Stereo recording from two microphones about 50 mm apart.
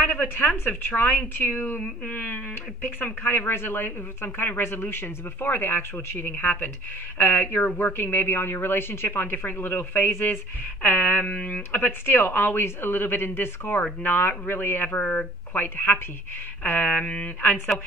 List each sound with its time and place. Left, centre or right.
0.2 s speech: left
15.0 s speech: centre
15.5 s speech: left